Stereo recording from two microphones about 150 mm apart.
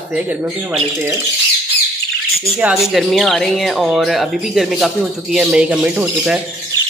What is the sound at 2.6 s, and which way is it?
Speech, 5° right (ahead or behind).